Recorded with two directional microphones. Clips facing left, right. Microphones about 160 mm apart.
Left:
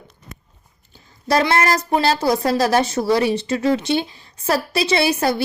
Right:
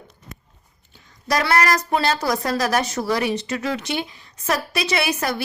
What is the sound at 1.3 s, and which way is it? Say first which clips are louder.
A woman's voice: left 2 dB; 25° left (ahead or behind).